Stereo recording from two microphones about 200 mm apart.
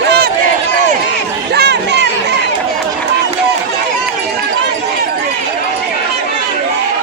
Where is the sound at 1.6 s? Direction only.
60° right (ahead or behind).